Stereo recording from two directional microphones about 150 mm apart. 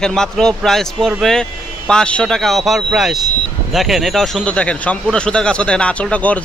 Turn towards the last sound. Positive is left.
turn(degrees=10)  # may be behind; listen again after turning